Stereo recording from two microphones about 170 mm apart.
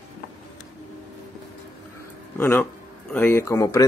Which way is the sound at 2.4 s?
15° left (ahead or behind).